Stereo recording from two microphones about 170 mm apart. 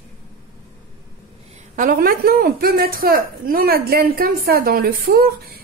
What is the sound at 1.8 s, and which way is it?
A woman's voice, 60° right (ahead or behind).